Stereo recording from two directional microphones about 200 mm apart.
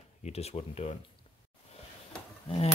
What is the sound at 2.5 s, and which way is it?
Speech, 30° left (ahead or behind).